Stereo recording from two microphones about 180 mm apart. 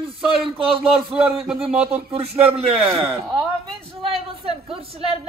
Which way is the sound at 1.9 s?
35° right (ahead or behind).